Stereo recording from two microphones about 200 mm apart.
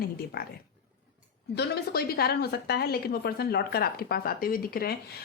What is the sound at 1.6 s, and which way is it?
A woman's voice, 50° left (ahead or behind).